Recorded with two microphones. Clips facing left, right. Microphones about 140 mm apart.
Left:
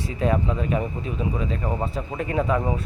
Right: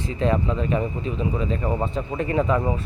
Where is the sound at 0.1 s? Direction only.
5° left (ahead or behind).